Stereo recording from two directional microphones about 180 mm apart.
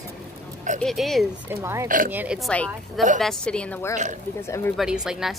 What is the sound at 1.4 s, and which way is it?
Speech, 15° right (ahead or behind).